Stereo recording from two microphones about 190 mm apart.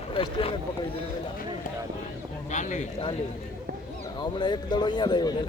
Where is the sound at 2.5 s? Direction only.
40° left (ahead or behind).